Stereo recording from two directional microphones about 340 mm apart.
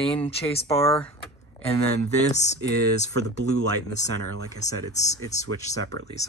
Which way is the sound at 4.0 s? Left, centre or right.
Left.